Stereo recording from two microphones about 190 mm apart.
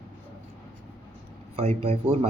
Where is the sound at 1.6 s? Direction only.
30° right (ahead or behind).